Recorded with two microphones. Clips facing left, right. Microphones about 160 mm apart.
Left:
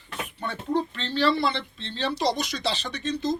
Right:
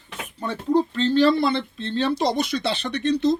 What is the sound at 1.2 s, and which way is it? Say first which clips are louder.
Speech: right 5 dB; 50° right (ahead or behind).